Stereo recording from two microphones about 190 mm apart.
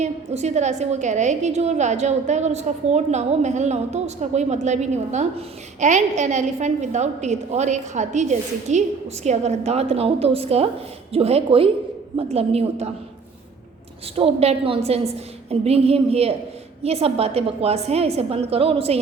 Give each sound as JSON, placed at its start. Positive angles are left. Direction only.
{"t": 0.0, "sound": "a woman's voice", "side_deg": -35}
{"t": 14.2, "sound": "a woman's voice", "side_deg": -30}